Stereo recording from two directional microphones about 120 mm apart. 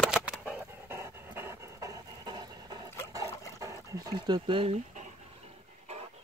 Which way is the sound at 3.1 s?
25° right (ahead or behind).